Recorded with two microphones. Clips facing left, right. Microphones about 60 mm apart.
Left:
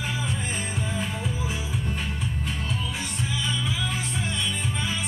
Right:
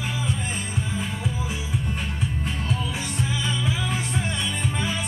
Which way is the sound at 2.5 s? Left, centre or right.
Right.